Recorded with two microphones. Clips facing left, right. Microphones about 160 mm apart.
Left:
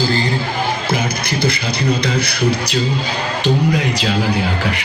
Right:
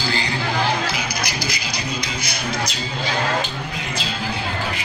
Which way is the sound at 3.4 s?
70° left (ahead or behind).